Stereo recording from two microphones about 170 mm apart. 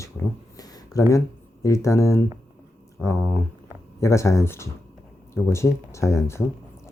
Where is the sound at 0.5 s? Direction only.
20° left (ahead or behind).